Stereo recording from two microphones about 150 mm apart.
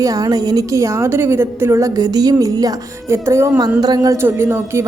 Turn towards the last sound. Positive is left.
turn(degrees=-15)  # may be behind; listen again after turning